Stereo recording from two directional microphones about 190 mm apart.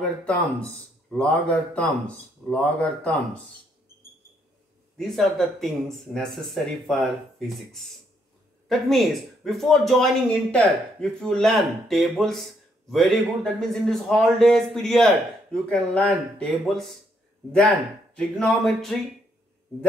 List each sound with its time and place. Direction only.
1.1 s speech: 5° left (ahead or behind)
4.9 s a man's voice: centre (ahead or behind)
18.1 s a man's voice: 5° left (ahead or behind)